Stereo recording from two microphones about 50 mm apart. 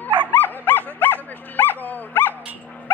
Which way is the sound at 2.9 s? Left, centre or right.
Left.